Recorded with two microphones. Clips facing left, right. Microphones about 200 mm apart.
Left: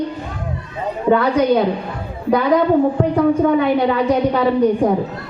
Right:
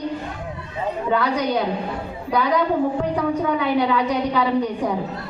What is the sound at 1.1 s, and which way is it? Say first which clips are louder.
A woman's voice: left 8 dB; 55° left (ahead or behind).